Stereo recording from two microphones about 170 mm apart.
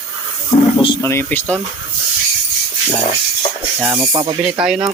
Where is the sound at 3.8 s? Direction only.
15° right (ahead or behind).